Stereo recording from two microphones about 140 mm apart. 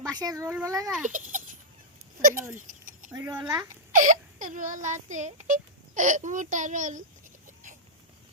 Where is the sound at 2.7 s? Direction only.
70° right (ahead or behind).